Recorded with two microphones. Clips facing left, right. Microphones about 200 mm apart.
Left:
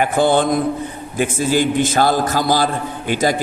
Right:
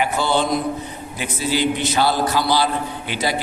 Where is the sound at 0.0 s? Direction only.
50° left (ahead or behind).